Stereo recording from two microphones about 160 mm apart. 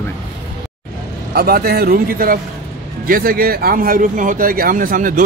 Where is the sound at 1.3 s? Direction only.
70° right (ahead or behind).